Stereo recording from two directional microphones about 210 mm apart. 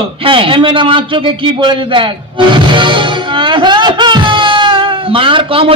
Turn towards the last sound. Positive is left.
turn(degrees=-25)  # may be behind; listen again after turning